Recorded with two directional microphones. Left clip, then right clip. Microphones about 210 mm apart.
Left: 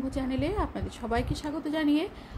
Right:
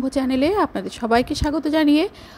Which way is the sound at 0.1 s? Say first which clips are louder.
Right 13 dB; 40° right (ahead or behind).